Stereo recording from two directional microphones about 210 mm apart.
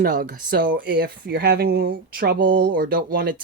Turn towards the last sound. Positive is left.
turn(degrees=-45)  # may be behind; listen again after turning